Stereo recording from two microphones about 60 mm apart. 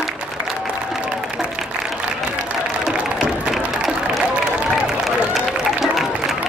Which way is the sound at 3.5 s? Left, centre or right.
Centre.